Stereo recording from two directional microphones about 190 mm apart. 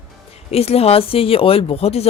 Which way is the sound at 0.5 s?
30° left (ahead or behind).